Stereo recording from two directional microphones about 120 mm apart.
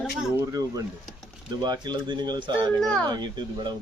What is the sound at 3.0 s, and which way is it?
Speech, 40° right (ahead or behind).